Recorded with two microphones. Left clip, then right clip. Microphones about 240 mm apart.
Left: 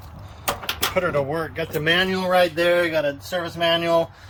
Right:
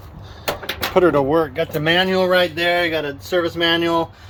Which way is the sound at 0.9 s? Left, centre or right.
Right.